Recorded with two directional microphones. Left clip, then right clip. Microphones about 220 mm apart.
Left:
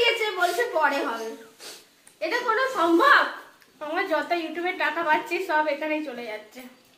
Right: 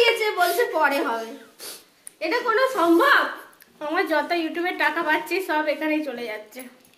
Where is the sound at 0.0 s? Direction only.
50° right (ahead or behind).